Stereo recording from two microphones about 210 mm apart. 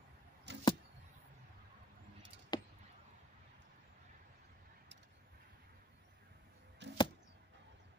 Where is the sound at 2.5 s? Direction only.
20° left (ahead or behind).